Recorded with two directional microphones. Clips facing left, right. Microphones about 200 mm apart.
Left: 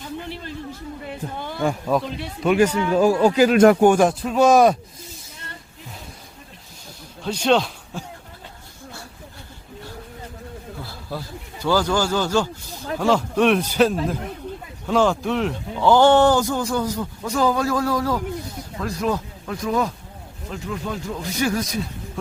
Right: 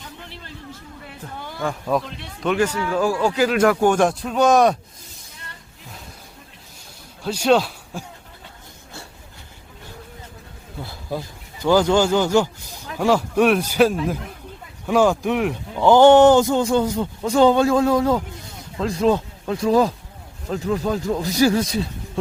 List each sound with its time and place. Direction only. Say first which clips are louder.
1.9 s speech: left 1 dB; centre (ahead or behind); by 3.8 s 25° left (ahead or behind)
3.8 s a man's voice: left 2 dB; 5° left (ahead or behind)
7.3 s speech: right 2 dB; 5° right (ahead or behind)
10.8 s a man's voice: right 6 dB; 20° right (ahead or behind)